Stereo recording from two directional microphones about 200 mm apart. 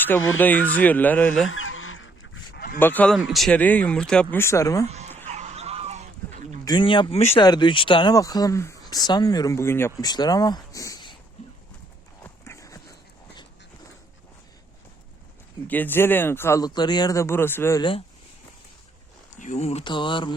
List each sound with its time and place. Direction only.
0.3 s speech: 10° left (ahead or behind)
1.5 s goose: 85° left
2.7 s speech: 10° left (ahead or behind)
4.9 s a sound: 35° right (ahead or behind)
6.7 s speech: 25° left (ahead or behind)
12.2 s horse: 15° left (ahead or behind)
15.6 s speech: 10° left (ahead or behind)
19.4 s speech: 35° left (ahead or behind)